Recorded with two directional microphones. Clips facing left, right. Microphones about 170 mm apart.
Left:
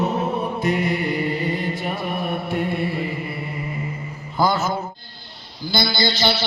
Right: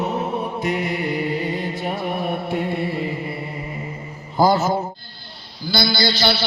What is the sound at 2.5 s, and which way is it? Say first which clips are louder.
Mantra: even; 20° right (ahead or behind).